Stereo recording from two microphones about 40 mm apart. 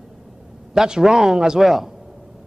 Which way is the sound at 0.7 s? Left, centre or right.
Centre.